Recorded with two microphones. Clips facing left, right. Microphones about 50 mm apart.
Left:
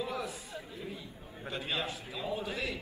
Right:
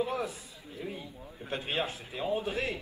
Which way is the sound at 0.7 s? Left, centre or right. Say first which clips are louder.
Right 6 dB; right.